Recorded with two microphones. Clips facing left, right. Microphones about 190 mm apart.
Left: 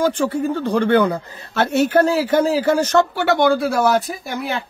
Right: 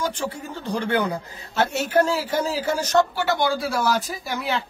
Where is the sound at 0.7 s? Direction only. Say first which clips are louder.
Left 6 dB; 60° left (ahead or behind).